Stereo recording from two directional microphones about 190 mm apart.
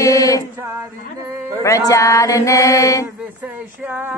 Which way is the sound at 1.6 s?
15° left (ahead or behind).